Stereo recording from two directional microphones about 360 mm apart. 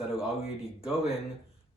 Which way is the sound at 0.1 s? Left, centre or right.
Centre.